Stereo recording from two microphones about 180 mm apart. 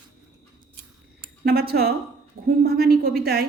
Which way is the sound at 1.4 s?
60° right (ahead or behind).